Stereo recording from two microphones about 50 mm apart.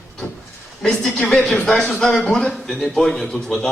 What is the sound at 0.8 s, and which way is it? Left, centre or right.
A man's voice, centre.